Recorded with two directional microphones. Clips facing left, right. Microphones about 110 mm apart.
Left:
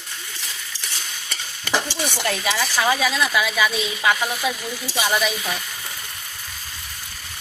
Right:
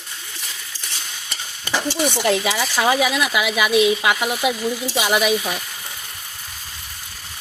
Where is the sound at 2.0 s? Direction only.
20° right (ahead or behind).